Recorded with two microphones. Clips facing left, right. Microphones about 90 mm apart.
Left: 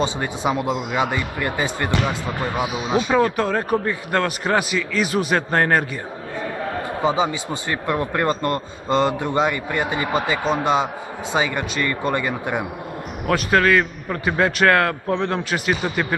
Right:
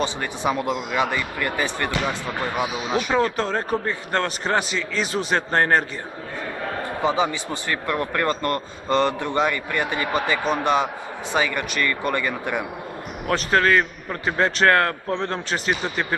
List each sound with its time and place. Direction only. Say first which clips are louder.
0.0 s speech: left 2 dB; 20° left (ahead or behind)
4.7 s a man's voice: left 4 dB; 25° right (ahead or behind)
5.3 s speech: right 1 dB; 5° left (ahead or behind)
7.0 s a man's voice: left 1 dB; 15° left (ahead or behind)
13.3 s a man's voice: left 2 dB; 5° left (ahead or behind)